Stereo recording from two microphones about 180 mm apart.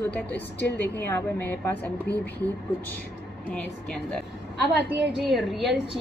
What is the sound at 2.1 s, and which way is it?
Speech, 65° left (ahead or behind).